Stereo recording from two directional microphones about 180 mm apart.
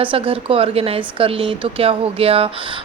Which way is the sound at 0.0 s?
30° right (ahead or behind).